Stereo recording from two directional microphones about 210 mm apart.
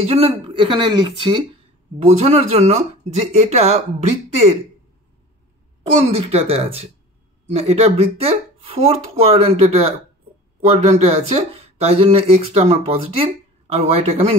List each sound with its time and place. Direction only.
0.0 s speech: 30° right (ahead or behind)
6.0 s speech: 25° right (ahead or behind)